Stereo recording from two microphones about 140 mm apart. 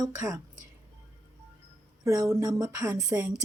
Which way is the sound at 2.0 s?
25° right (ahead or behind).